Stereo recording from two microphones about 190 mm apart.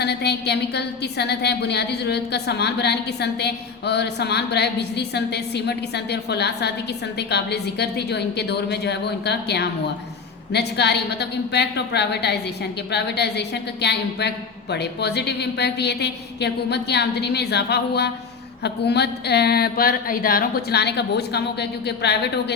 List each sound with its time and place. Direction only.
0.0 s a woman's voice: 60° left (ahead or behind)